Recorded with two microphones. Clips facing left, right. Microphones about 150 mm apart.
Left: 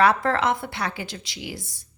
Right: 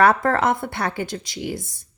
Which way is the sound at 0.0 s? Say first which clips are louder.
Right 3 dB; 50° right (ahead or behind).